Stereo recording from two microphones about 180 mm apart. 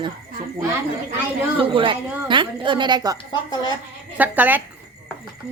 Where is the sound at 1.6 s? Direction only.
30° right (ahead or behind).